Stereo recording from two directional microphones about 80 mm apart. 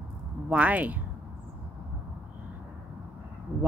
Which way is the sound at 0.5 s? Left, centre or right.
Centre.